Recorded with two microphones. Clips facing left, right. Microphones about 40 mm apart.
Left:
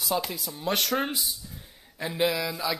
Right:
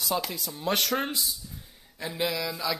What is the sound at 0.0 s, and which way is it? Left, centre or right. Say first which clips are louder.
Speech: left 1 dB; centre.